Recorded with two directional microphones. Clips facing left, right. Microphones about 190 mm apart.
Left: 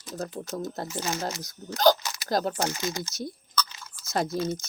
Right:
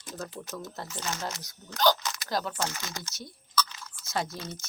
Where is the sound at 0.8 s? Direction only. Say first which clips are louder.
Left 5 dB; 10° left (ahead or behind).